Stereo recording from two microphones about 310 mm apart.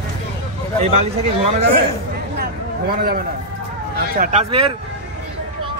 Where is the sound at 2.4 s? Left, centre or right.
Right.